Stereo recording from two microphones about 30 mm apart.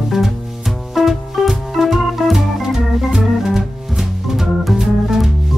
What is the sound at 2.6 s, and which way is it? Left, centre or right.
Organ, centre.